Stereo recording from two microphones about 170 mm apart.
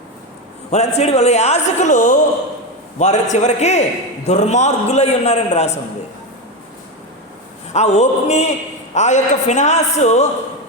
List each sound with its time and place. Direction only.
0.7 s a man's voice: 40° left (ahead or behind)
7.7 s a man's voice: 40° left (ahead or behind)